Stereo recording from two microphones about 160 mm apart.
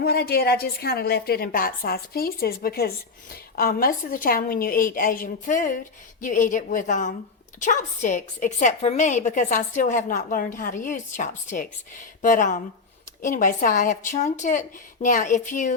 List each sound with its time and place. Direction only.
0.0 s a woman's voice: 75° left (ahead or behind); by 15.7 s 50° left (ahead or behind)